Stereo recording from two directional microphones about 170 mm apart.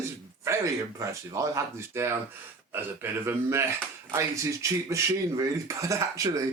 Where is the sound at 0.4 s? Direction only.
15° right (ahead or behind).